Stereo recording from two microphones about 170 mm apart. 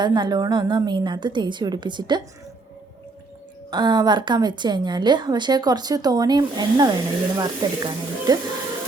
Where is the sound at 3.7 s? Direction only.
25° right (ahead or behind).